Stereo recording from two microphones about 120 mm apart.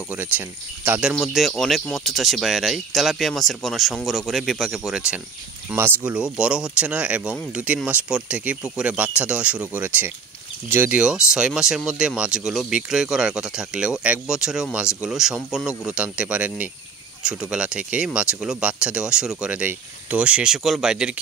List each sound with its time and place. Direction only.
0.1 s speech: 15° right (ahead or behind)
1.1 s speech: centre (ahead or behind); by 11.0 s 15° right (ahead or behind)
11.3 s speech: 5° right (ahead or behind)